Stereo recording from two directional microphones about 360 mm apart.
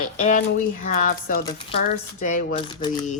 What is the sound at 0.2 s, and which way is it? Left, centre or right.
Speech, left.